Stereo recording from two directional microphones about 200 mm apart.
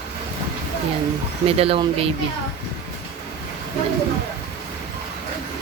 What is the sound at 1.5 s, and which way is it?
Speech, 30° right (ahead or behind).